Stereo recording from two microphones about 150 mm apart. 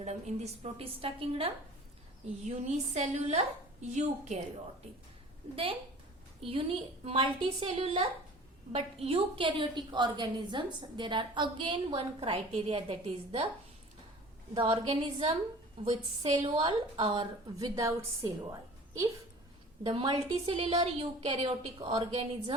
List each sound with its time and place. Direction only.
0.0 s a woman's voice: 50° right (ahead or behind)
6.4 s a woman's voice: 40° right (ahead or behind)
14.5 s a woman's voice: 35° right (ahead or behind)
15.8 s a woman's voice: 45° right (ahead or behind)
16.3 s a woman's voice: 30° right (ahead or behind)
19.8 s a woman's voice: 30° right (ahead or behind)